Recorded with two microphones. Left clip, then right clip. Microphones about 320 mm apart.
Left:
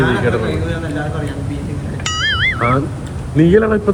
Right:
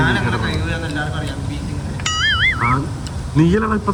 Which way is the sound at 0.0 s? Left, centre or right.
Centre.